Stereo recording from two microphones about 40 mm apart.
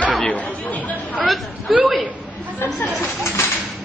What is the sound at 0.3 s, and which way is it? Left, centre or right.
Chatter, left.